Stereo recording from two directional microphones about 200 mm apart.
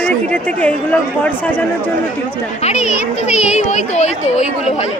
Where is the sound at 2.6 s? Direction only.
35° left (ahead or behind).